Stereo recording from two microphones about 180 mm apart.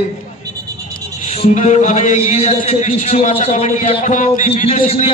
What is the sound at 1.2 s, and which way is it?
A man's voice, 40° left (ahead or behind).